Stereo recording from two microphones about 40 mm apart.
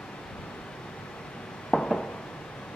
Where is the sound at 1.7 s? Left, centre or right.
Centre.